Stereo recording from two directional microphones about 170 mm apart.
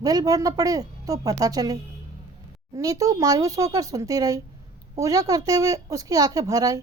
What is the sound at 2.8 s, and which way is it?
A woman's voice, 20° right (ahead or behind).